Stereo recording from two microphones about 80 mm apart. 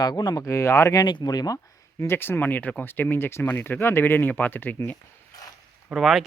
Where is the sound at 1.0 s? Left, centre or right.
Left.